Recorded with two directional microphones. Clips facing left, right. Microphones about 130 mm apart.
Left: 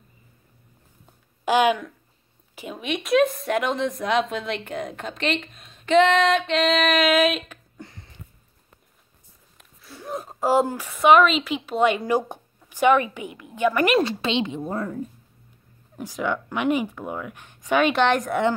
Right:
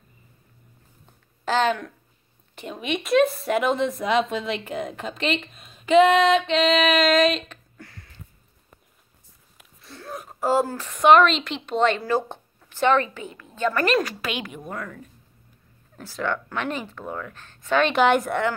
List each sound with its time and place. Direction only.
1.4 s a woman's voice: 10° left (ahead or behind)
9.6 s a sound: centre (ahead or behind)
9.9 s a woman's voice: 20° left (ahead or behind)
16.0 s speech: 15° left (ahead or behind)
17.9 s a woman's voice: 5° right (ahead or behind)